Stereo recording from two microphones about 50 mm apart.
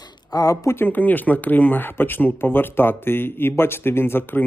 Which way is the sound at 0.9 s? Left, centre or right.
Left.